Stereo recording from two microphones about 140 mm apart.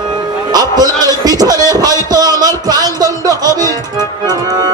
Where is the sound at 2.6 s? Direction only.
25° right (ahead or behind).